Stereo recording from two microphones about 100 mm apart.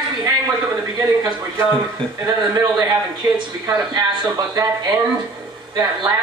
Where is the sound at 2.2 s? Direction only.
40° right (ahead or behind).